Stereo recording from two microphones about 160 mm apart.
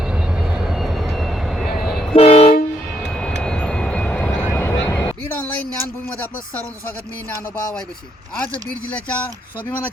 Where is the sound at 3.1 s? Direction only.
5° left (ahead or behind).